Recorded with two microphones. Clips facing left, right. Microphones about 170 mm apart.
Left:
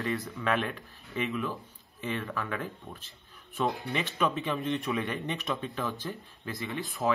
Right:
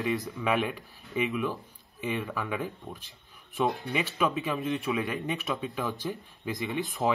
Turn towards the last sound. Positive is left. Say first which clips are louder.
# right 2 dB
turn(degrees=-20)  # may be behind; listen again after turning